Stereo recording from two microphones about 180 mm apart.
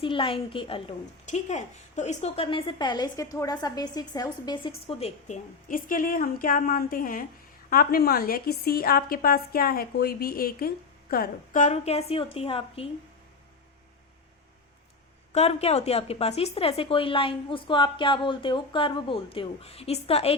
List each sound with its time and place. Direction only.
0.0 s a woman's voice: 30° left (ahead or behind)
4.9 s a woman's voice: 35° left (ahead or behind)
15.3 s a woman's voice: 35° left (ahead or behind)